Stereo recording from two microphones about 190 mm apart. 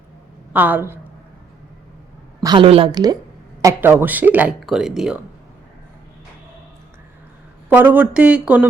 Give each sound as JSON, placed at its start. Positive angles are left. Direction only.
{"t": 0.5, "sound": "speech", "side_deg": -10}
{"t": 2.4, "sound": "a woman's voice", "side_deg": -25}
{"t": 7.7, "sound": "speech", "side_deg": -10}